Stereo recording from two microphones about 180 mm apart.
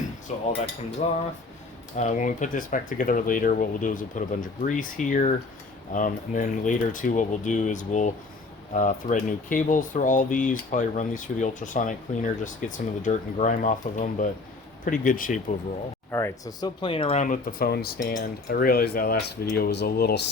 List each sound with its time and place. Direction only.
0.3 s speech: 40° left (ahead or behind)
16.1 s speech: 20° left (ahead or behind); by 18.0 s 60° left (ahead or behind)
18.1 s cutlery: 55° left (ahead or behind)